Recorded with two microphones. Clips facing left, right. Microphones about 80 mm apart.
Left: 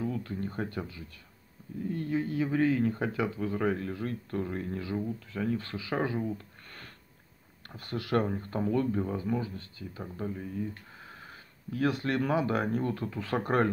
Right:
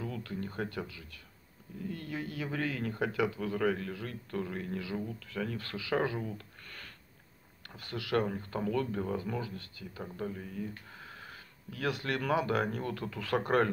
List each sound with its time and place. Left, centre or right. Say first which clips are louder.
0.0 s speech: left 5 dB; left
7.6 s speech: left 4 dB; left
10.1 s speech: left 2 dB; centre
11.2 s speech: left 4 dB; left